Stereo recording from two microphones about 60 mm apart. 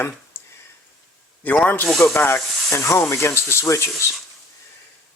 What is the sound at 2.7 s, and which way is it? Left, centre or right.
Speech, left.